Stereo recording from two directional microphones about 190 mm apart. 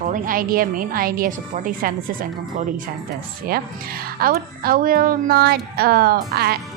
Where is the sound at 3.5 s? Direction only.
50° right (ahead or behind).